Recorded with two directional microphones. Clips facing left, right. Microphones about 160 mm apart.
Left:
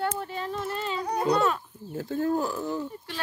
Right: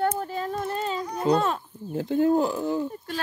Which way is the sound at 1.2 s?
35° right (ahead or behind).